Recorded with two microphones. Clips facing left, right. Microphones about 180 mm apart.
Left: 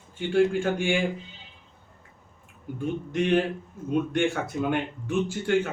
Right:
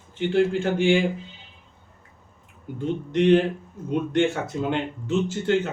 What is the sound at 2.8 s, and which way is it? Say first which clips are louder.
Speech: right 4 dB; 20° right (ahead or behind).